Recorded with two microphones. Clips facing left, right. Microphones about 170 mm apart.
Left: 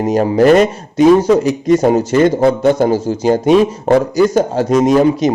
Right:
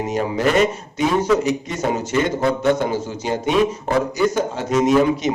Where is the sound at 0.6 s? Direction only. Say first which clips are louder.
Left 8 dB; 35° left (ahead or behind).